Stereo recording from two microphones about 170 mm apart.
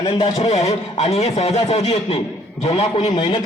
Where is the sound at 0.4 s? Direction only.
40° left (ahead or behind).